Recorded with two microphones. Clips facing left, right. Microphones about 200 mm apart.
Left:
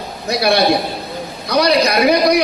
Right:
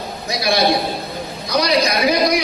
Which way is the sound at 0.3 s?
65° left (ahead or behind).